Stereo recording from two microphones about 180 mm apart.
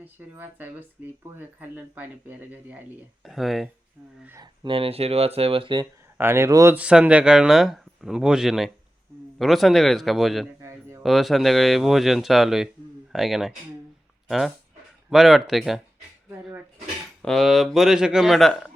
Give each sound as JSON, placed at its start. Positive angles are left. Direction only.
{"t": 0.0, "sound": "speech", "side_deg": -10}
{"t": 4.6, "sound": "speech", "side_deg": -30}
{"t": 6.1, "sound": "speech", "side_deg": -15}
{"t": 10.6, "sound": "a sound", "side_deg": -15}
{"t": 11.0, "sound": "speech", "side_deg": 0}
{"t": 16.3, "sound": "dishes", "side_deg": -10}
{"t": 17.2, "sound": "speech", "side_deg": 0}